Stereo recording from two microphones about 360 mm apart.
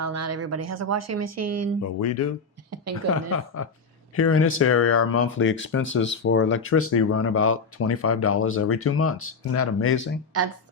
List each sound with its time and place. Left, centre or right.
0.0 s speech: right
1.8 s speech: left